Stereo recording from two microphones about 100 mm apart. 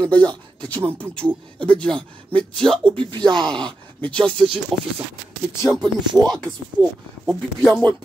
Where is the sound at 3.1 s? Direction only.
50° right (ahead or behind).